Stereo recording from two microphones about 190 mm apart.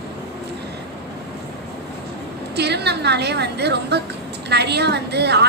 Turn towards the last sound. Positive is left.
turn(degrees=-60)  # may be behind; listen again after turning